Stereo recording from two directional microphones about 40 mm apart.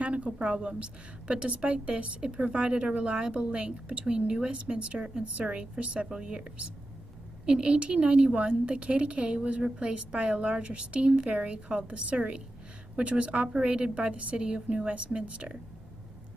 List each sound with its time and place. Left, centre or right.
0.0 s a woman's voice: right
7.4 s a woman's voice: right